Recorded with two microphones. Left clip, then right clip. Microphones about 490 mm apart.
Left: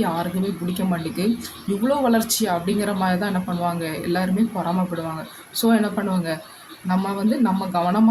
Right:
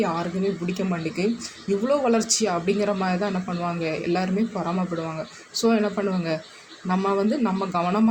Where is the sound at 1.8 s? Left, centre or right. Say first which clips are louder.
Left 2 dB; left.